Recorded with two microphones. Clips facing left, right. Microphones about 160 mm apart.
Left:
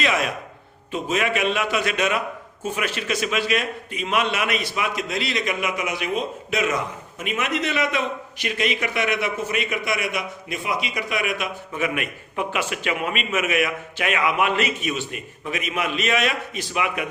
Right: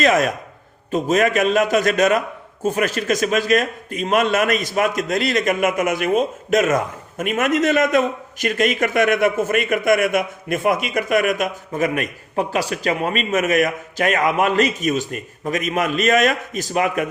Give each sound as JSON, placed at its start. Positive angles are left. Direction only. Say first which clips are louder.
{"t": 0.0, "sound": "a man's voice", "louder": "right 7 dB", "side_deg": -45}